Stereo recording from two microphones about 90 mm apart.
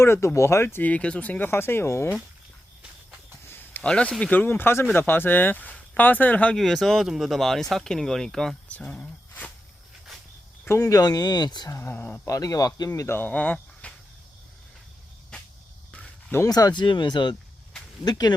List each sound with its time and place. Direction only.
0.0 s speech: 30° left (ahead or behind)
0.9 s speech: 10° left (ahead or behind); by 2.1 s 30° left (ahead or behind)
3.4 s a sound: 25° left (ahead or behind)
3.8 s speech: 10° left (ahead or behind)
6.6 s speech: 5° left (ahead or behind)
8.7 s speech: 15° left (ahead or behind)
10.7 s speech: 35° left (ahead or behind); by 11.7 s 50° left (ahead or behind)
11.7 s speech: 30° left (ahead or behind)
12.3 s speech: 40° left (ahead or behind)
13.0 s speech: 25° left (ahead or behind)
16.5 s speech: 45° left (ahead or behind)
16.8 s speech: 60° left (ahead or behind)